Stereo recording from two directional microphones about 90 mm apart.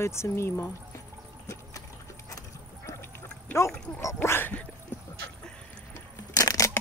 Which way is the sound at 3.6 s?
35° left (ahead or behind).